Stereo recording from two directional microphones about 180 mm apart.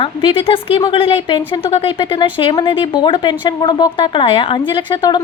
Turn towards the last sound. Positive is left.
turn(degrees=25)  # may be behind; listen again after turning